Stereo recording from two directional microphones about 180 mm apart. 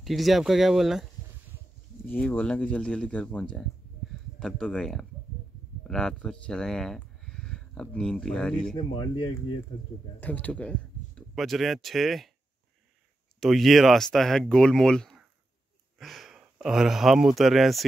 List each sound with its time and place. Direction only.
0.0 s speech: centre (ahead or behind)
2.1 s speech: 5° left (ahead or behind)
8.7 s speech: 25° left (ahead or behind)
10.2 s speech: 10° left (ahead or behind)
13.4 s speech: centre (ahead or behind)